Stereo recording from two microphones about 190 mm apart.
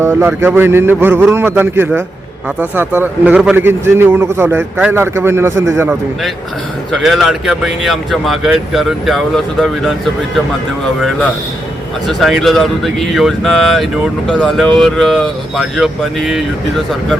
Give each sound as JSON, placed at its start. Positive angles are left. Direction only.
{"t": 0.0, "sound": "speech", "side_deg": -10}
{"t": 6.9, "sound": "speech", "side_deg": 0}
{"t": 12.0, "sound": "speech", "side_deg": 0}